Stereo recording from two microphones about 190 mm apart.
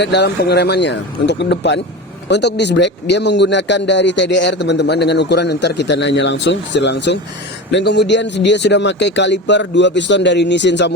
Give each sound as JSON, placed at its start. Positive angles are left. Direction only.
{"t": 0.0, "sound": "a man's voice", "side_deg": 60}